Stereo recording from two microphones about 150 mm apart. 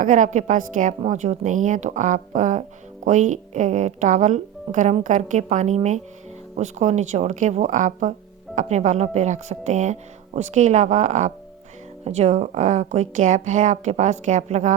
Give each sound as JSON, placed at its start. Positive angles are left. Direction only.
{"t": 0.0, "sound": "a woman's voice", "side_deg": -55}